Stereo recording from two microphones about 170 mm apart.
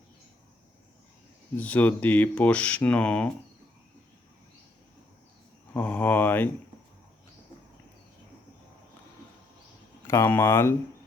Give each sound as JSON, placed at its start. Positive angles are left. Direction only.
{"t": 1.5, "sound": "speech", "side_deg": 10}
{"t": 5.7, "sound": "speech", "side_deg": 10}
{"t": 10.1, "sound": "speech", "side_deg": 15}